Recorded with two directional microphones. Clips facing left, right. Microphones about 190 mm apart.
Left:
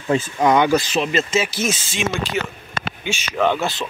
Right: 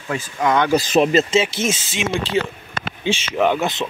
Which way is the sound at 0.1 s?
25° left (ahead or behind).